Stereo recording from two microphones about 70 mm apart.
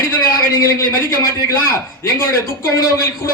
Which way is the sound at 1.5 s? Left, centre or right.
Left.